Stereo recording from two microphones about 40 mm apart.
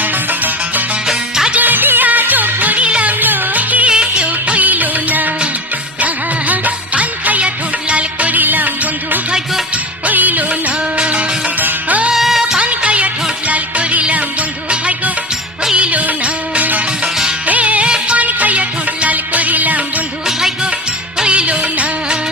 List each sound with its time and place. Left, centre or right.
0.0 s music: right
1.0 s music: centre
1.5 s music: right
3.8 s music: right
4.3 s music: right
6.0 s music of bollywood: right
8.4 s music: right
10.5 s music: right
12.1 s music: centre
12.5 s music of bollywood: right
13.5 s music: right
18.2 s music: right
20.2 s music: centre
21.2 s music: right